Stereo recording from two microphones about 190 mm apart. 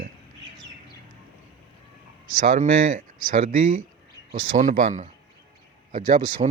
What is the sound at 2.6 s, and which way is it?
Speech, 45° right (ahead or behind).